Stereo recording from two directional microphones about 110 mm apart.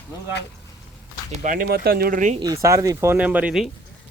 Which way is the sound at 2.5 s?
30° right (ahead or behind).